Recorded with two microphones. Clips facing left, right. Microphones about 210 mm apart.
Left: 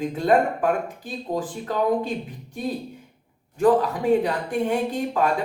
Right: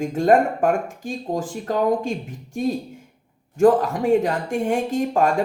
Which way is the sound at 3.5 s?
45° right (ahead or behind).